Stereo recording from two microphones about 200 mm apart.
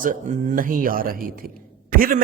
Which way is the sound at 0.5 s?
45° right (ahead or behind).